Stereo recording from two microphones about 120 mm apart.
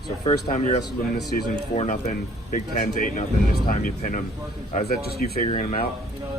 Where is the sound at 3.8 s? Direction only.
90° left.